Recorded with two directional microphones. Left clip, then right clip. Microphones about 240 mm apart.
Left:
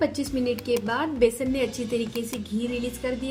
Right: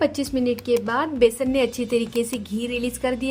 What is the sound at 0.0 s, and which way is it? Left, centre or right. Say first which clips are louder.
Speech: right 3 dB; right.